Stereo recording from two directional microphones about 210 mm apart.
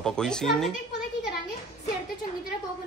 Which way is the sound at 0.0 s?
5° left (ahead or behind).